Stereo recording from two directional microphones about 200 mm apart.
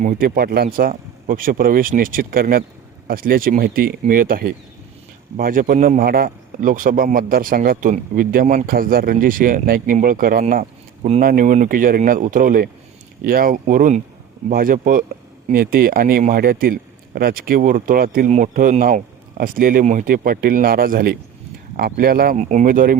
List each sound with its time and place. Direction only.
0.0 s a man's voice: 40° right (ahead or behind)